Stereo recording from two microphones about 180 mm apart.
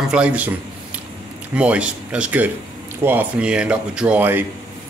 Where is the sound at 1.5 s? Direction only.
5° right (ahead or behind).